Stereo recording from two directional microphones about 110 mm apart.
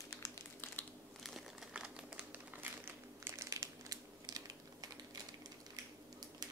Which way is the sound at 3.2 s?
30° right (ahead or behind).